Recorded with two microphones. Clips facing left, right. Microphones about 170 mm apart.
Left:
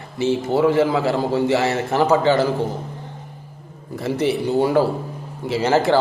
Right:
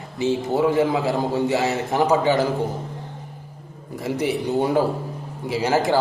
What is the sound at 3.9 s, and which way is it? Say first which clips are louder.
A man's voice: left 3 dB; 15° right (ahead or behind).